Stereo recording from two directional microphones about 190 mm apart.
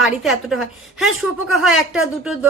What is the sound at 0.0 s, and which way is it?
Music, centre (ahead or behind).